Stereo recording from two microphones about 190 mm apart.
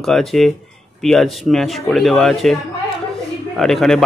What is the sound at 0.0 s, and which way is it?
Speech, centre (ahead or behind).